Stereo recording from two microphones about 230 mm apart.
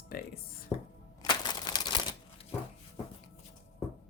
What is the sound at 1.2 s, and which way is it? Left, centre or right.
Crumpling, centre.